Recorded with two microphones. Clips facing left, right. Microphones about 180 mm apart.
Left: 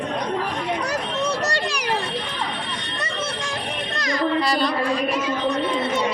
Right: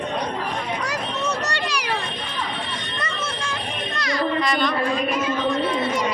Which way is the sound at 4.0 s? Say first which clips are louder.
Left 1 dB; 40° left (ahead or behind).